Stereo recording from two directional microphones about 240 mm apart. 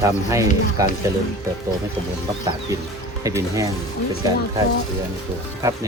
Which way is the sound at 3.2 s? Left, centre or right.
Centre.